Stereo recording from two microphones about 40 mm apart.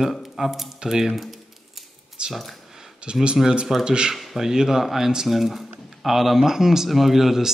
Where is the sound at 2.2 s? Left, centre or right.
Right.